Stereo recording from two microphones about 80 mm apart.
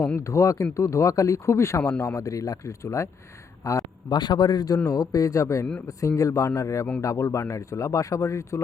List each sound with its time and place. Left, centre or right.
0.3 s speech: left
4.1 s a man's voice: left